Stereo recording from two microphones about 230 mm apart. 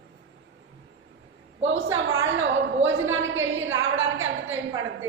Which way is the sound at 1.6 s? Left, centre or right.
Right.